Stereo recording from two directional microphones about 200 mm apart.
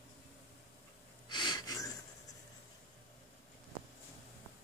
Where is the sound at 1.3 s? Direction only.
20° left (ahead or behind).